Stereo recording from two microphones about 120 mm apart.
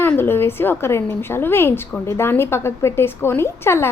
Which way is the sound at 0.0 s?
20° left (ahead or behind).